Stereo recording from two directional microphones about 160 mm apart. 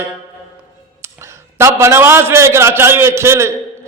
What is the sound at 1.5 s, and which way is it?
A man's voice, 15° right (ahead or behind).